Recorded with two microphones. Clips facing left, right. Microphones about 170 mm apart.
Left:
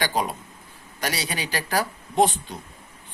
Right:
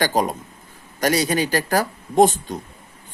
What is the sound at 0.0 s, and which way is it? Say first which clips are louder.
A man's voice: right 5 dB; 45° right (ahead or behind).